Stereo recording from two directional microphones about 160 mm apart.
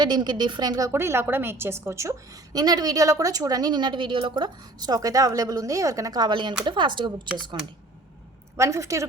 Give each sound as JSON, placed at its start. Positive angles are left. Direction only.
{"t": 0.0, "sound": "a woman's voice", "side_deg": -25}
{"t": 8.5, "sound": "a woman's voice", "side_deg": -20}